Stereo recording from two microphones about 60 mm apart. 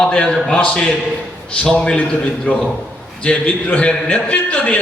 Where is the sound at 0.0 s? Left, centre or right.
Centre.